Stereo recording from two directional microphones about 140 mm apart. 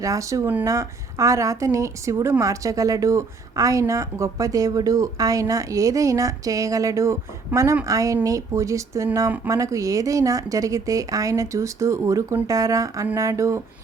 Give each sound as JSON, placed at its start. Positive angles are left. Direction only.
{"t": 0.0, "sound": "speech", "side_deg": -25}